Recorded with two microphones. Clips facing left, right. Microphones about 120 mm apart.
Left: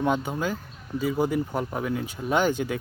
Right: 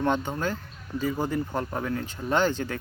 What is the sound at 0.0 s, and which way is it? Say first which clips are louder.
Speech: left 1 dB; 10° left (ahead or behind).